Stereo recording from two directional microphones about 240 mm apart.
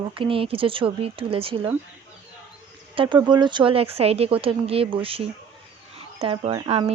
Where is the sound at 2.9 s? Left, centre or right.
Right.